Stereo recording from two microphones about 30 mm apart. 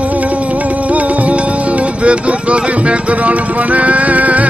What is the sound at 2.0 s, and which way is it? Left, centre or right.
Music, right.